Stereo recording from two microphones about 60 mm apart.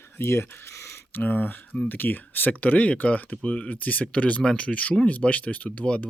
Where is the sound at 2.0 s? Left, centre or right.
Left.